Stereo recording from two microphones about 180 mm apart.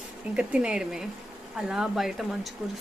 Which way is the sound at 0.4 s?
5° right (ahead or behind).